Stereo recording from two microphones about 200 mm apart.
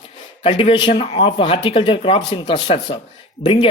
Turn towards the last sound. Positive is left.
turn(degrees=25)  # may be behind; listen again after turning